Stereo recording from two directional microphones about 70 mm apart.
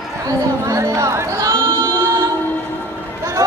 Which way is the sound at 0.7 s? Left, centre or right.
Right.